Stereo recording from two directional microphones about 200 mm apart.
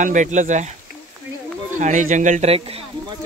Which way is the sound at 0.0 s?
40° right (ahead or behind).